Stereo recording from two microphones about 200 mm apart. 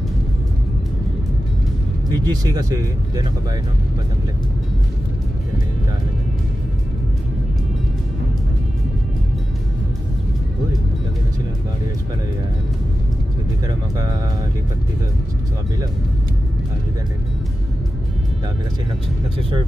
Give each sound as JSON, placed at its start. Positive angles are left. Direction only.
{"t": 2.0, "sound": "speech", "side_deg": -20}